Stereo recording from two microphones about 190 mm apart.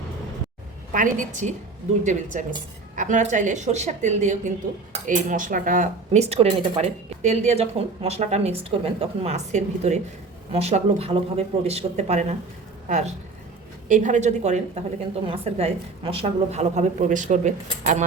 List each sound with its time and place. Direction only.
0.9 s speech: 40° right (ahead or behind)
6.1 s speech: 35° right (ahead or behind)